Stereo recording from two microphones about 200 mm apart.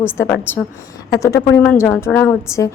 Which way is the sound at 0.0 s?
10° left (ahead or behind).